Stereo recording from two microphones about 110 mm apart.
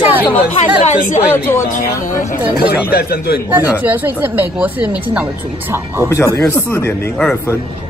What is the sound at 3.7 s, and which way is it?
Speech, 15° right (ahead or behind).